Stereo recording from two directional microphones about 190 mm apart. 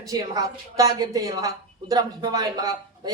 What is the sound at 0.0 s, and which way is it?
A woman's voice, 20° right (ahead or behind).